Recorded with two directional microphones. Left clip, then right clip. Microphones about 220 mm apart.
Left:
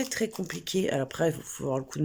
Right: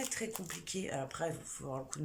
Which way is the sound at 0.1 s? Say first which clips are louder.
Left 9 dB; 40° left (ahead or behind).